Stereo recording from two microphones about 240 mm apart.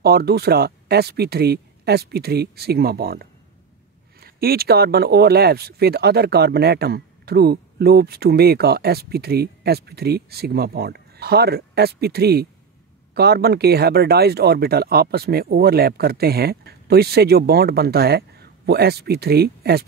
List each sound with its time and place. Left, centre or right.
0.0 s speech: right